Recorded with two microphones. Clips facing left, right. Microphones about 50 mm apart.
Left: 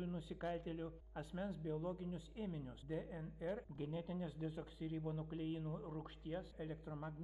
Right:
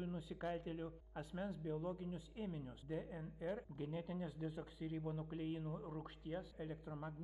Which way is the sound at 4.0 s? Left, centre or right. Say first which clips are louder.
Even; right.